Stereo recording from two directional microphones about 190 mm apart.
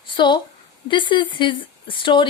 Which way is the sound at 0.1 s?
25° left (ahead or behind).